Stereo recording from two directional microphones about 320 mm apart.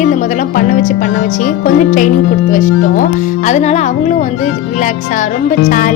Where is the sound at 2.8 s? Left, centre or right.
Left.